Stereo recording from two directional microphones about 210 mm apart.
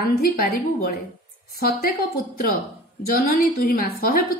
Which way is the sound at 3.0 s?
40° left (ahead or behind).